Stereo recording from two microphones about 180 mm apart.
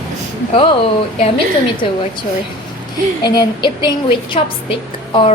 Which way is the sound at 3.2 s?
25° left (ahead or behind).